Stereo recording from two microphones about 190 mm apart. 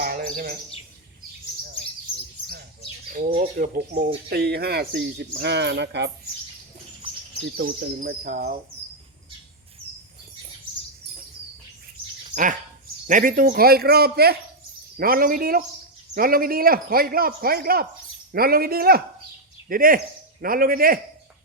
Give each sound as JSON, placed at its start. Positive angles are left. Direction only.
{"t": 0.0, "sound": "chirp", "side_deg": -50}
{"t": 3.1, "sound": "speech", "side_deg": -40}
{"t": 4.3, "sound": "speech", "side_deg": -55}
{"t": 7.5, "sound": "a man's voice", "side_deg": -50}
{"t": 12.3, "sound": "a man's voice", "side_deg": -45}